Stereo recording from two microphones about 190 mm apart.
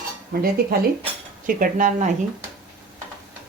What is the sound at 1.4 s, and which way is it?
Speech, 45° right (ahead or behind).